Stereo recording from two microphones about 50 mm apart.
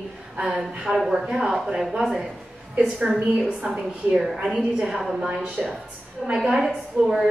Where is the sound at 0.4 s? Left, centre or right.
Centre.